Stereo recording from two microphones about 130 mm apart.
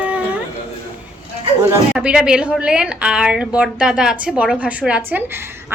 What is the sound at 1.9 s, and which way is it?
A woman's voice, 5° right (ahead or behind).